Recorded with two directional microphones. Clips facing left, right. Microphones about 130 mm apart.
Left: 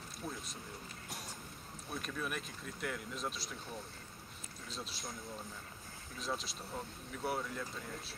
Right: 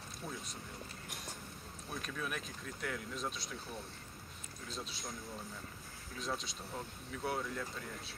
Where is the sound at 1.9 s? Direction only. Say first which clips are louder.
Left 1 dB; centre (ahead or behind).